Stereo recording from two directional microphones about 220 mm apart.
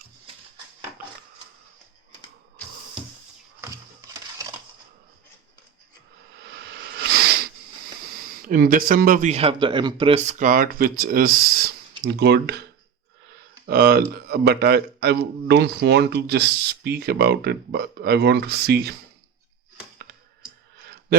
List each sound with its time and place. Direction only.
6.7 s a sound: 50° right (ahead or behind)
8.4 s speech: 40° right (ahead or behind)
13.7 s a man's voice: 45° right (ahead or behind)